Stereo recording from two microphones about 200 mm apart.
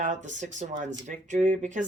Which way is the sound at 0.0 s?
35° right (ahead or behind).